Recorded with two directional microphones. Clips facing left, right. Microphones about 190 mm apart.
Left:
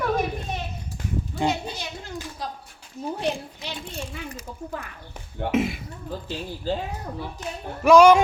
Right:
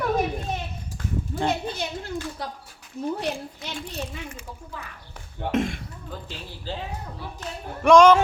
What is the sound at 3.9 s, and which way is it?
Speech, 35° left (ahead or behind).